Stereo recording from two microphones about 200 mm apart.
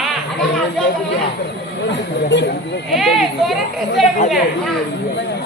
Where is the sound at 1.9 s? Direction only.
60° left (ahead or behind).